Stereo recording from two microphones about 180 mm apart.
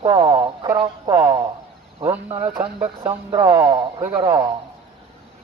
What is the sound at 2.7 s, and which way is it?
Speech, 25° right (ahead or behind).